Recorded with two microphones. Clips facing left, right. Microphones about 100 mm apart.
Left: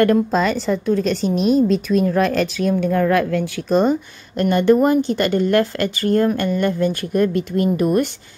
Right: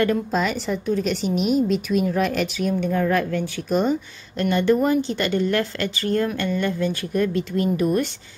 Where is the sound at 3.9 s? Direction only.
45° left (ahead or behind).